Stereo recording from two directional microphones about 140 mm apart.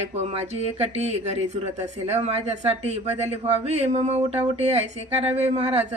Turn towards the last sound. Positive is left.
turn(degrees=-50)  # may be behind; listen again after turning